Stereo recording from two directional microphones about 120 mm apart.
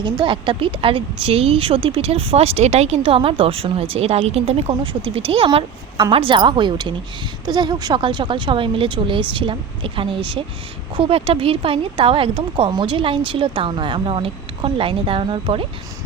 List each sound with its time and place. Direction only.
0.0 s a woman's voice: 45° right (ahead or behind)
4.7 s a woman's voice: 45° right (ahead or behind)